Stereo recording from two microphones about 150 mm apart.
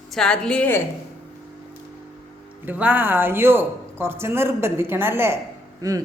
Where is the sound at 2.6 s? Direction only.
10° right (ahead or behind).